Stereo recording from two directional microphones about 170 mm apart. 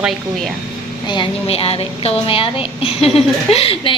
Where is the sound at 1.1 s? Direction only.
30° left (ahead or behind).